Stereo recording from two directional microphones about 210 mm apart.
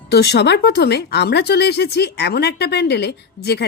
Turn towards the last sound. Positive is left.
turn(degrees=50)  # may be behind; listen again after turning